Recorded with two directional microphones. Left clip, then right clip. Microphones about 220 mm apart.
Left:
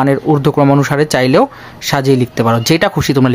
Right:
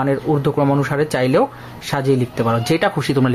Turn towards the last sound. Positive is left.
turn(degrees=30)  # may be behind; listen again after turning